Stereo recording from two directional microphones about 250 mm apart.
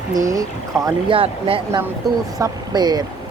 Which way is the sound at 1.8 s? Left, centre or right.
Centre.